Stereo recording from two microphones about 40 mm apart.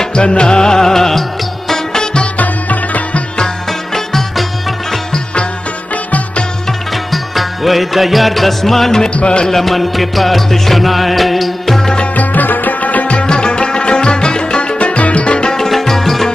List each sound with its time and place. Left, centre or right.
0.0 s music: left
2.3 s music: left
3.9 s music: centre
5.1 s music: left
7.1 s music: centre
9.1 s music: left
9.5 s music: centre
12.2 s music: left
13.2 s music: left
15.6 s music: centre